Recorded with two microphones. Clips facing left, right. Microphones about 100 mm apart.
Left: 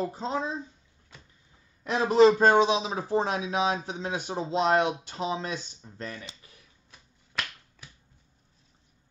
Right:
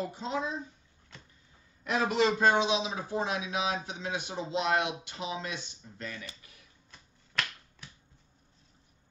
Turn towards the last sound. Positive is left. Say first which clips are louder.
# even
turn(degrees=5)  # may be behind; listen again after turning